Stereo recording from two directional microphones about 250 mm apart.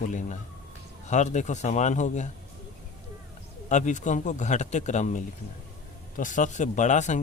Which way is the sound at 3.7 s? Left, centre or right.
Left.